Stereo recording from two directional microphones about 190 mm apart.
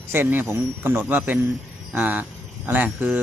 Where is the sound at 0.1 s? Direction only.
10° right (ahead or behind).